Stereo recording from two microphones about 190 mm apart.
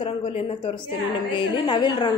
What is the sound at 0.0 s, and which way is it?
A woman's voice, 30° left (ahead or behind).